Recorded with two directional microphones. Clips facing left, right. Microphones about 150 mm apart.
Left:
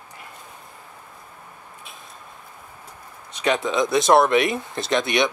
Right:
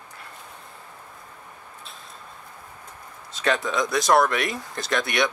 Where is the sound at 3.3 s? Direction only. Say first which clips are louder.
Left 2 dB; 20° left (ahead or behind).